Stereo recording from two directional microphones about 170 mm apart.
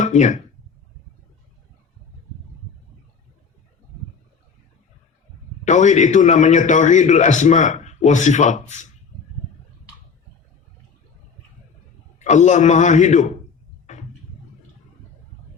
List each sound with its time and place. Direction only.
0.0 s speech: 45° left (ahead or behind)
5.6 s a man's voice: 45° left (ahead or behind)
12.2 s a man's voice: 45° left (ahead or behind)
13.9 s a sound: 45° left (ahead or behind)